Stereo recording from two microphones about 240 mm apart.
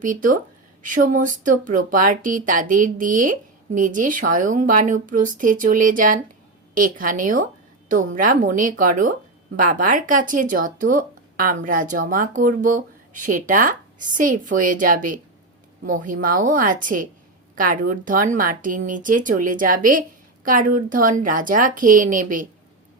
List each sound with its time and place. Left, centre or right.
0.0 s speech: right